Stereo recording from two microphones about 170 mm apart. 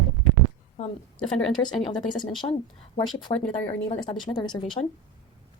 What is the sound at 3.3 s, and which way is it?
Speech, 40° left (ahead or behind).